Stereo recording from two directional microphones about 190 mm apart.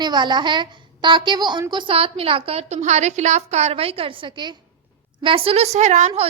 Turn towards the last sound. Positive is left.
turn(degrees=-35)  # may be behind; listen again after turning